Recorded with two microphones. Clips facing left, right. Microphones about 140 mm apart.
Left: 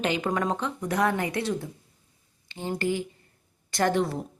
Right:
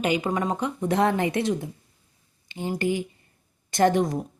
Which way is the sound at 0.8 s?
25° right (ahead or behind).